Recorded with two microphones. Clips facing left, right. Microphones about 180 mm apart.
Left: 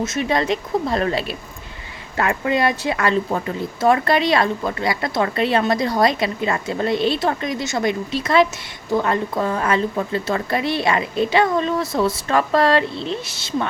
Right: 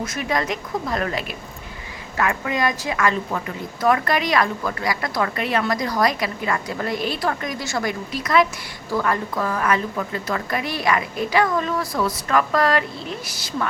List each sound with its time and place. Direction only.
0.0 s speech: 25° left (ahead or behind)